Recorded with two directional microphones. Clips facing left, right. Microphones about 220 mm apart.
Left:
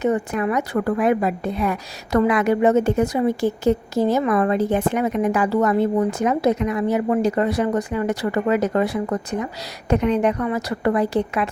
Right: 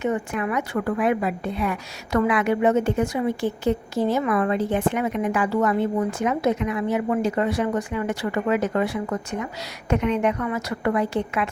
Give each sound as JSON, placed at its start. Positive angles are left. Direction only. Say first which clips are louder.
{"t": 0.0, "sound": "a woman's voice", "louder": "left 4 dB", "side_deg": 35}